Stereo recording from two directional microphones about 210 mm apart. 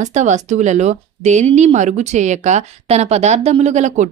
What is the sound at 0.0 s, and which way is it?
Speech, 35° right (ahead or behind).